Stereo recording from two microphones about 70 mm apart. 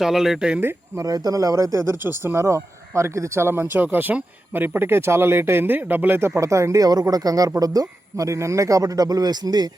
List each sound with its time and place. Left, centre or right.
0.0 s speech: centre
1.0 s speech: right
6.3 s speech: right